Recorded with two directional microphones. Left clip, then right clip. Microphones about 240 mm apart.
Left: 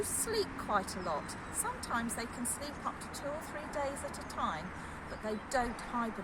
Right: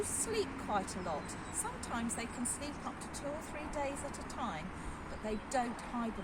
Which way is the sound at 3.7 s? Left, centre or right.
Centre.